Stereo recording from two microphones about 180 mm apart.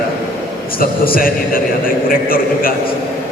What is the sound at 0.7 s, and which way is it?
A man's voice, 55° left (ahead or behind).